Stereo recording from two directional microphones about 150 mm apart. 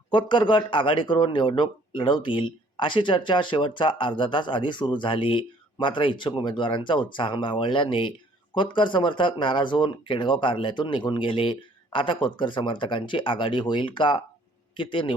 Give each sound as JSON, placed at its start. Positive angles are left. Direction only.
{"t": 0.1, "sound": "speech", "side_deg": 35}